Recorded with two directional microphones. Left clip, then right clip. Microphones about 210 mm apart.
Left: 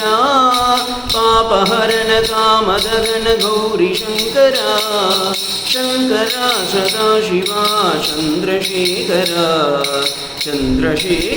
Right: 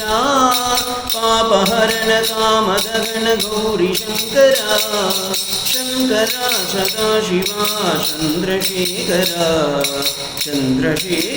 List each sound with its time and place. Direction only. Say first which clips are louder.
0.3 s music: left 1 dB; 15° left (ahead or behind)
4.4 s music: even; 15° left (ahead or behind)